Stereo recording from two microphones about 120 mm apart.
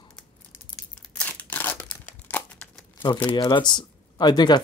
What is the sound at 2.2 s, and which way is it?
Crumpling, 10° left (ahead or behind).